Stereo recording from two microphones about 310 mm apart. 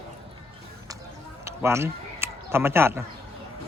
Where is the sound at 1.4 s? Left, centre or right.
Centre.